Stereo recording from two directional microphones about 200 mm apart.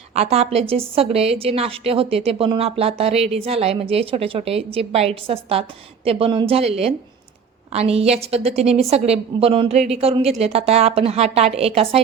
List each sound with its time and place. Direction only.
0.1 s a woman's voice: 30° right (ahead or behind)